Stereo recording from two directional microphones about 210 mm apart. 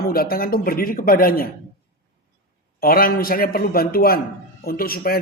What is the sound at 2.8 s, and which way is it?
Speech, 45° left (ahead or behind).